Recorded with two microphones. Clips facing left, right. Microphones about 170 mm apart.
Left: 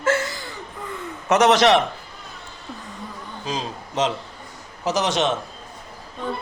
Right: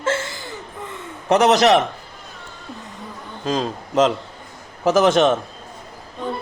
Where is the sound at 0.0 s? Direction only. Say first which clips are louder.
Left 1 dB; 25° right (ahead or behind).